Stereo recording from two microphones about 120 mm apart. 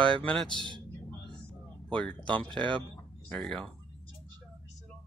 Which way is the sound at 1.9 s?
10° left (ahead or behind).